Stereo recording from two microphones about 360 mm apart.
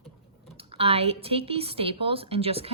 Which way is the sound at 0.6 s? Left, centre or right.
Centre.